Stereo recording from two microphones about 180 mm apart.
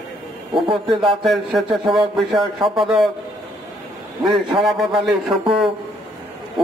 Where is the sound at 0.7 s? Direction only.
30° right (ahead or behind).